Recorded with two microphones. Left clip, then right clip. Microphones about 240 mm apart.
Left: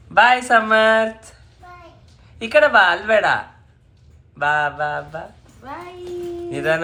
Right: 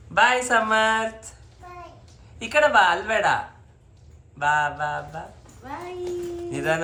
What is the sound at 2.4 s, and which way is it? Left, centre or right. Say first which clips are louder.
Speech: left 4 dB; centre.